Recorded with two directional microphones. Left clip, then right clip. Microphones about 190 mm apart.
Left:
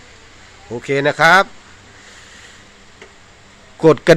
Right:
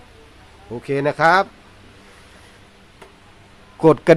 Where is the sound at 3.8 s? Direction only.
5° right (ahead or behind).